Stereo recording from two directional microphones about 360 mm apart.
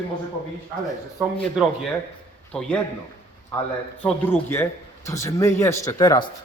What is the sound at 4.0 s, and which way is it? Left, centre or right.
A man's voice, centre.